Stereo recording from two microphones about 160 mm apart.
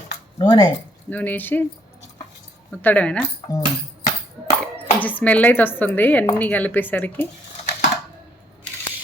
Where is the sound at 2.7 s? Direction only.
10° left (ahead or behind).